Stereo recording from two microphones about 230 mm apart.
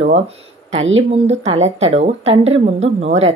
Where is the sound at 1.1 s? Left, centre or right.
Right.